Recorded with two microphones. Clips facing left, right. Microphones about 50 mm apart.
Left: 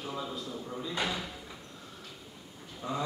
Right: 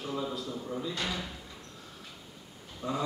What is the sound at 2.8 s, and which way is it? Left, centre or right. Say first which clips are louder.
Speech: right 2 dB; centre.